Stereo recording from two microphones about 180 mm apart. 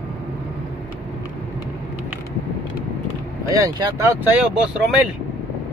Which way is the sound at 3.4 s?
20° right (ahead or behind).